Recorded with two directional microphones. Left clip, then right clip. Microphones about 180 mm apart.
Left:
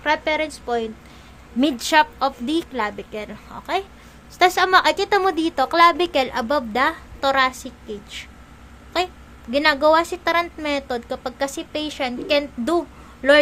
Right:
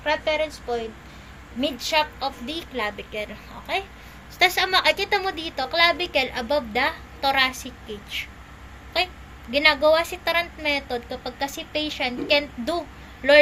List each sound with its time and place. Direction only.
0.0 s a woman's voice: 55° left (ahead or behind)
2.7 s a woman's voice: 35° left (ahead or behind)
9.5 s a woman's voice: 35° left (ahead or behind)